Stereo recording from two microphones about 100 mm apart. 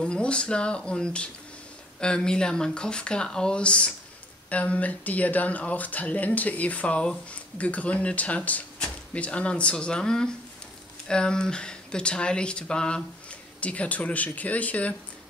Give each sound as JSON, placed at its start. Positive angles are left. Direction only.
{"t": 0.0, "sound": "speech", "side_deg": 10}